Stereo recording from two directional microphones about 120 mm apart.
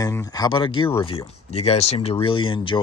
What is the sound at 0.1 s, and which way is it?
Speech, 30° left (ahead or behind).